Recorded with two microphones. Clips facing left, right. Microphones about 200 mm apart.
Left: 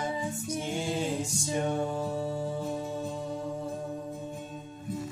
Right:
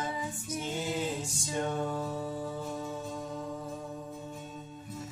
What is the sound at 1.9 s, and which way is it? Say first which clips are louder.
Music: left 3 dB; 25° left (ahead or behind).